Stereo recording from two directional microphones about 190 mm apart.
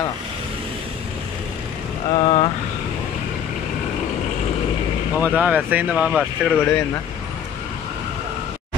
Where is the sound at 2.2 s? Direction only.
30° left (ahead or behind).